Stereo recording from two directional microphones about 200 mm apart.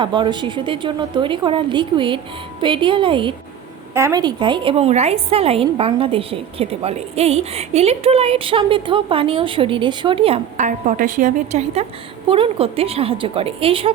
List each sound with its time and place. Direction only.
0.0 s a woman's voice: 25° right (ahead or behind)